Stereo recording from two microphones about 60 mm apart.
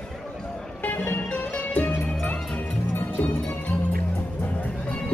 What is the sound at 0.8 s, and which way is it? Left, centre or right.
Music, left.